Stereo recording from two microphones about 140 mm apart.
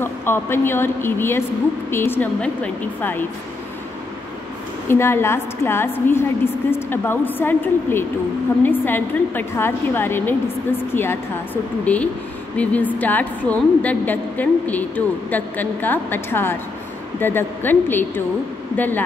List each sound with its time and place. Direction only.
0.0 s a woman's voice: 15° left (ahead or behind)
4.8 s a woman's voice: 15° left (ahead or behind)